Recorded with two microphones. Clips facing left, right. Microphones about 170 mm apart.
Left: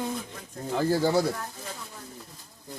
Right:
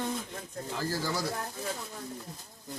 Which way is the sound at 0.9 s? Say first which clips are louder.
Left 11 dB; 60° left (ahead or behind).